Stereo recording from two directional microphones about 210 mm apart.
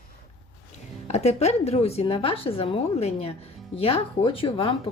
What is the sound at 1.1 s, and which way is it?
Speech, 30° left (ahead or behind).